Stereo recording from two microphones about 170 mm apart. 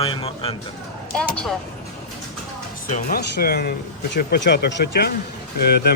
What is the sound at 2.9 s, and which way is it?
Speech, 70° left (ahead or behind).